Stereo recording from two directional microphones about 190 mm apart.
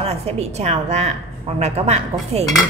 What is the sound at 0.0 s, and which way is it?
A woman's voice, 35° right (ahead or behind).